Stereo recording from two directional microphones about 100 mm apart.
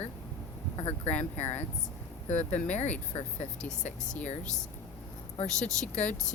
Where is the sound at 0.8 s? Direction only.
90° left.